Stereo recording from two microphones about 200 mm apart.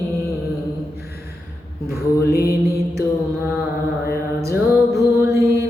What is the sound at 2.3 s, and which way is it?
Mantra, 50° left (ahead or behind).